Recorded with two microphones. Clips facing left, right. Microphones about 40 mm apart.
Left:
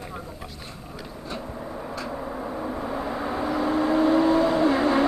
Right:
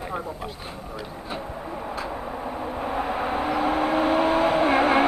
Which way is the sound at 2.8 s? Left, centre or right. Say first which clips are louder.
Right 6 dB; right.